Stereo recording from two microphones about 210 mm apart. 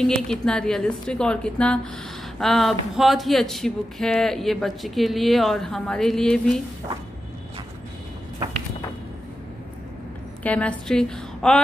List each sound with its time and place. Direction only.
0.0 s speech: 5° left (ahead or behind)
10.4 s speech: 5° left (ahead or behind)